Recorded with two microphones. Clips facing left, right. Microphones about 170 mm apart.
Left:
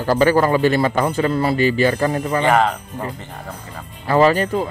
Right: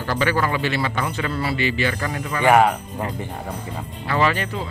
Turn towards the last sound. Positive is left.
turn(degrees=40)  # may be behind; listen again after turning